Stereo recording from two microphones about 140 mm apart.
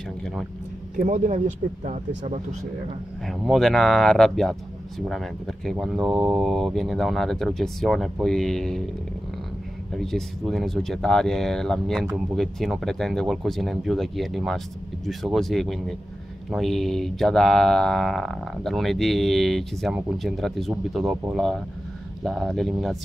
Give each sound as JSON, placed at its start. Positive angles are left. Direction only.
{"t": 0.9, "sound": "speech", "side_deg": -60}
{"t": 3.3, "sound": "speech", "side_deg": 0}
{"t": 9.9, "sound": "speech", "side_deg": 5}